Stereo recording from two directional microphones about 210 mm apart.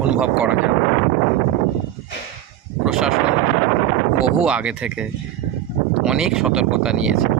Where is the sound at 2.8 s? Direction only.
Centre (ahead or behind).